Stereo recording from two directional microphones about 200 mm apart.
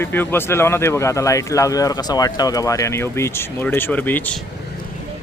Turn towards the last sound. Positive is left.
turn(degrees=10)  # may be behind; listen again after turning